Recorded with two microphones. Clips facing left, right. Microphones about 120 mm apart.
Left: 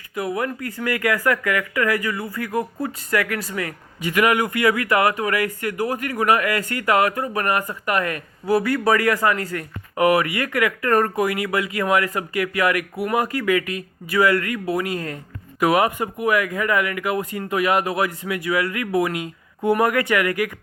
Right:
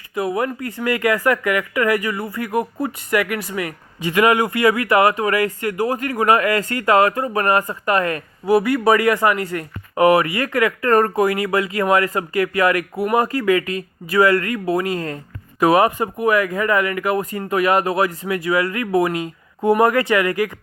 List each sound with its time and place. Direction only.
0.1 s speech: 30° right (ahead or behind)
8.4 s speech: 20° right (ahead or behind)